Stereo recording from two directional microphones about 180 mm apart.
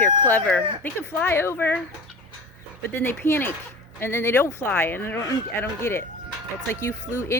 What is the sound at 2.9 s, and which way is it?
Speech, 10° left (ahead or behind).